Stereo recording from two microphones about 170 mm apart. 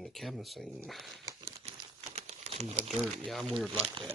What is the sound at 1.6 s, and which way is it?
Crumpling, 40° right (ahead or behind).